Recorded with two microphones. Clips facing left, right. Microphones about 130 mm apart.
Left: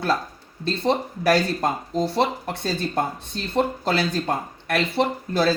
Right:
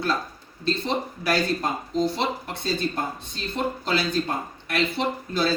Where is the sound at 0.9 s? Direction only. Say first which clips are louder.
Left 9 dB; 50° left (ahead or behind).